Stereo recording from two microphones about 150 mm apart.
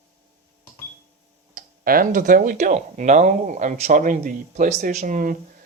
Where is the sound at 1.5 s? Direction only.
70° right (ahead or behind).